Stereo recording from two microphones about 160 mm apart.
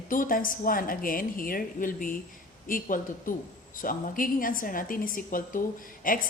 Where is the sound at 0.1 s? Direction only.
60° left (ahead or behind).